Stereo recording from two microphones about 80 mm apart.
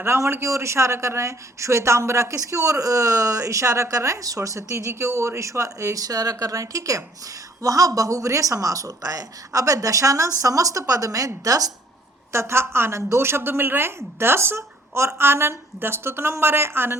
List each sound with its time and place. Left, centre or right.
0.0 s a man's voice: right
12.3 s a man's voice: right